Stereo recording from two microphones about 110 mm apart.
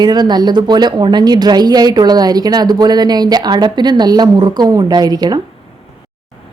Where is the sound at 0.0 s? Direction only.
40° right (ahead or behind).